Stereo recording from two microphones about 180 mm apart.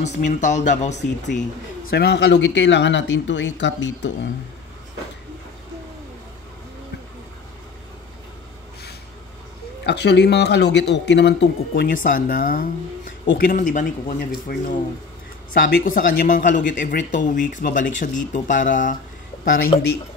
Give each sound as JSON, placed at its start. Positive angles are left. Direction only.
{"t": 0.0, "sound": "speech", "side_deg": 40}
{"t": 1.9, "sound": "speech", "side_deg": 65}
{"t": 9.8, "sound": "speech", "side_deg": 70}
{"t": 12.0, "sound": "speech", "side_deg": 50}
{"t": 19.7, "sound": "speech", "side_deg": 30}